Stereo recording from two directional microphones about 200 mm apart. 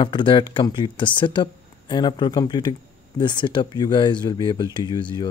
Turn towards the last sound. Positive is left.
turn(degrees=25)  # may be behind; listen again after turning